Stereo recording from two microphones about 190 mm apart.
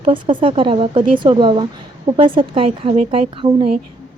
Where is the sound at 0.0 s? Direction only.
25° right (ahead or behind).